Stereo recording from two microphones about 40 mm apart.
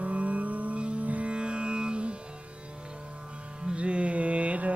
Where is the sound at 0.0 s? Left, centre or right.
Right.